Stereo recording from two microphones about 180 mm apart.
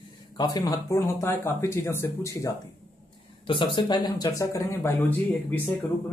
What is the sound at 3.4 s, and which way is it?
Speech, 25° left (ahead or behind).